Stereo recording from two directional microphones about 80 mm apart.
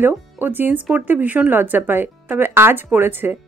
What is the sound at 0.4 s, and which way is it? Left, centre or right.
Speech, right.